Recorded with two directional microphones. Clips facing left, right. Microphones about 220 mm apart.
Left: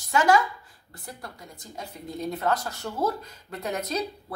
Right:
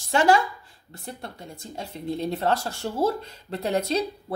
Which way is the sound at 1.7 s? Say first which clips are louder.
Right 5 dB; 30° right (ahead or behind).